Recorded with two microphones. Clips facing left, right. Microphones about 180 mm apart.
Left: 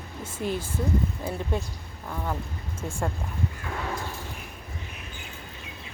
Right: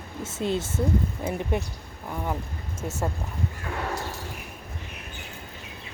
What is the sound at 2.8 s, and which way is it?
Speech, 5° right (ahead or behind).